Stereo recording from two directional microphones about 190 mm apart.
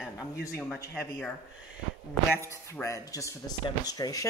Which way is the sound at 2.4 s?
15° left (ahead or behind).